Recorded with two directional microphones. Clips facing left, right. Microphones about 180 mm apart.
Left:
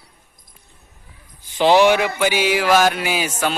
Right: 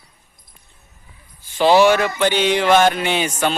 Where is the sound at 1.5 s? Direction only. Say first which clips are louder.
Right 1 dB; 15° left (ahead or behind).